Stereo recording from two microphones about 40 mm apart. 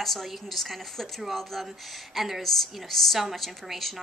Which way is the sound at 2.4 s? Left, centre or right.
Centre.